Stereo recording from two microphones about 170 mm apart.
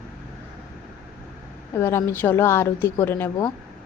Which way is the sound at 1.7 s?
15° left (ahead or behind).